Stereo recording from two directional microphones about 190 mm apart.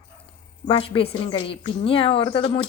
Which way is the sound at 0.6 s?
25° left (ahead or behind).